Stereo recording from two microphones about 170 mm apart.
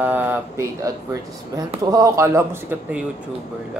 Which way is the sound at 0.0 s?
10° right (ahead or behind).